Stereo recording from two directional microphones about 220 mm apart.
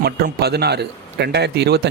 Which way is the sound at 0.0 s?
45° right (ahead or behind).